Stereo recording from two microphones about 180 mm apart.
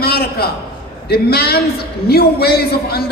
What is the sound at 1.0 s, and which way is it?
A man's voice, 60° left (ahead or behind).